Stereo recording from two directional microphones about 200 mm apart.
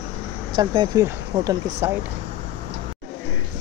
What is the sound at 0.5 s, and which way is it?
Speech, 20° right (ahead or behind).